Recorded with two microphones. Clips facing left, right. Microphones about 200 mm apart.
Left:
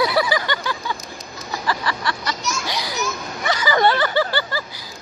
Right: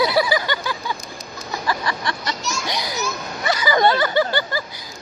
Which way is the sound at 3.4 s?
15° right (ahead or behind).